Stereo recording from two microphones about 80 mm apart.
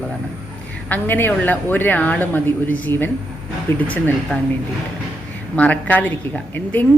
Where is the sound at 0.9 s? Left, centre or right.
Left.